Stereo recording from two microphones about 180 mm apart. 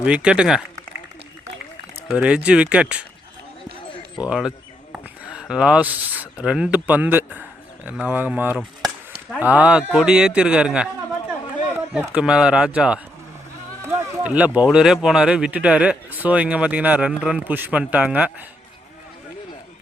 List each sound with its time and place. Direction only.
0.0 s speech: 5° right (ahead or behind)
2.0 s speech: 5° right (ahead or behind)
4.2 s speech: 5° right (ahead or behind)
11.9 s speech: 5° right (ahead or behind)